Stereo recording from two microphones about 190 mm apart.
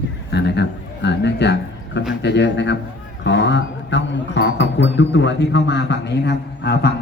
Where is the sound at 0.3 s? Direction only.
65° left (ahead or behind).